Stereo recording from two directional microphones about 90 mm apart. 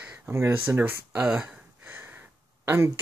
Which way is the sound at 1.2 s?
10° right (ahead or behind).